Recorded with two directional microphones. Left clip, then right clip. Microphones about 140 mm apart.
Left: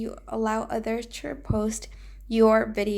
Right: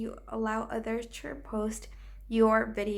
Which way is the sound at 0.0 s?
20° left (ahead or behind).